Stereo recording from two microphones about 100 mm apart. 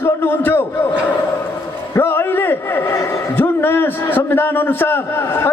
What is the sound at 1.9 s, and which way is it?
A man's voice, 20° left (ahead or behind).